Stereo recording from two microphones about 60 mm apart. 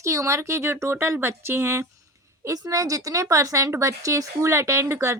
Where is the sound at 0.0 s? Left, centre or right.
Right.